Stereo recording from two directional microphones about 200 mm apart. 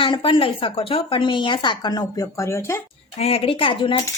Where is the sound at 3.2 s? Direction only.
30° left (ahead or behind).